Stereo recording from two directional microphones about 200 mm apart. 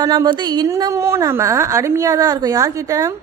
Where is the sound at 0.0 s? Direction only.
20° right (ahead or behind).